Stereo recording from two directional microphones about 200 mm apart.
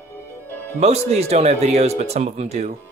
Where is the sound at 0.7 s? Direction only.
30° right (ahead or behind).